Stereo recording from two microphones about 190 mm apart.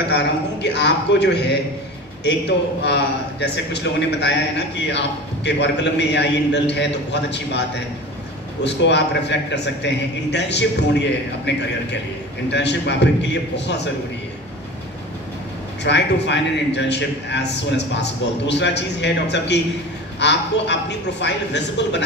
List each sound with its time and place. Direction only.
0.1 s a man's voice: 65° left (ahead or behind)
8.6 s a man's voice: 65° left (ahead or behind)
15.8 s a man's voice: 65° left (ahead or behind)